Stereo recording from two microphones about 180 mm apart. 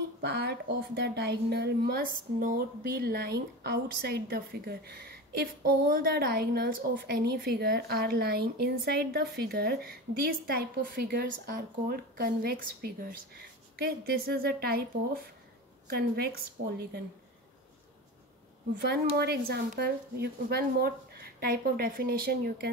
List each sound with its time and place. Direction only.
0.2 s a woman's voice: 65° right (ahead or behind)
15.9 s a woman's voice: 60° right (ahead or behind)
18.8 s a woman's voice: 65° right (ahead or behind)